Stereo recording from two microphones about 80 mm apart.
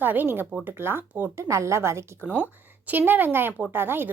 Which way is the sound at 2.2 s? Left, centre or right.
Centre.